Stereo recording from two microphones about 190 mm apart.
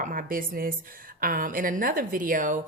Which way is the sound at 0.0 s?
45° right (ahead or behind).